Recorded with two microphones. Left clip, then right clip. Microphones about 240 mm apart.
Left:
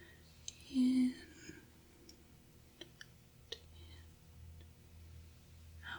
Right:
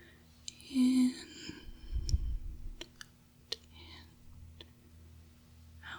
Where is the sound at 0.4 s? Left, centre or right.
Centre.